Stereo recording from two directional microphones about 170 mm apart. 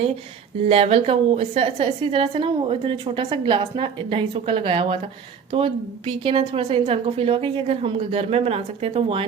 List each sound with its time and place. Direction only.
0.7 s a woman's voice: 35° right (ahead or behind)